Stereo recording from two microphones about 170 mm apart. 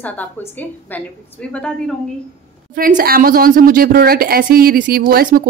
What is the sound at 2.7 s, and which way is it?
A woman's voice, 55° right (ahead or behind).